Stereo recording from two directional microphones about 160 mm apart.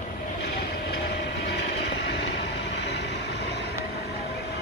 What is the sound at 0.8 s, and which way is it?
Train, 90° left.